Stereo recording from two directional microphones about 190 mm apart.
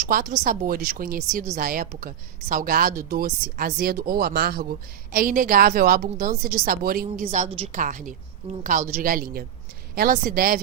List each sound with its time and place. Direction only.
0.1 s a woman's voice: 45° right (ahead or behind)